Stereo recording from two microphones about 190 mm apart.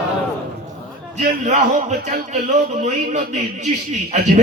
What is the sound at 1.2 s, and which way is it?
A man's voice, 40° right (ahead or behind).